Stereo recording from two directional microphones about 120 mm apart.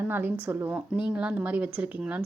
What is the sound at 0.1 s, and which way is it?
A woman's voice, 15° right (ahead or behind).